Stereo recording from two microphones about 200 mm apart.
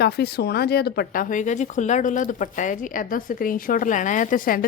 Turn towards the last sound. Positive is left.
turn(degrees=45)  # may be behind; listen again after turning